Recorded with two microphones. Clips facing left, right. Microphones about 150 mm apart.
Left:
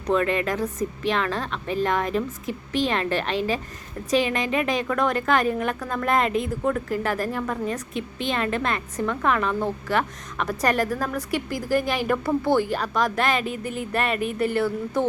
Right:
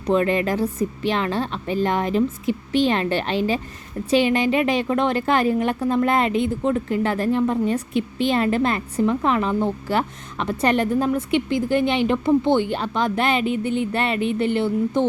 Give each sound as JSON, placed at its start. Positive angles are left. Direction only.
{"t": 0.1, "sound": "a woman's voice", "side_deg": -30}